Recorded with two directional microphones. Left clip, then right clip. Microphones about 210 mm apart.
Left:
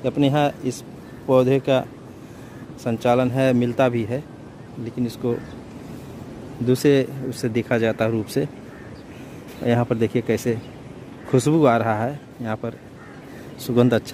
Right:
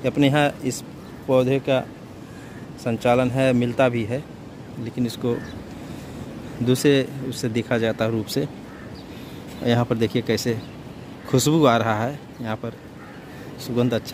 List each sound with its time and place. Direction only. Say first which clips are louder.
0.0 s speech: even; centre (ahead or behind)
1.3 s a man's voice: left 2 dB; 15° left (ahead or behind)
6.6 s speech: left 1 dB; 5° left (ahead or behind)
9.7 s speech: left 1 dB; centre (ahead or behind)
13.7 s a man's voice: left 4 dB; 15° left (ahead or behind)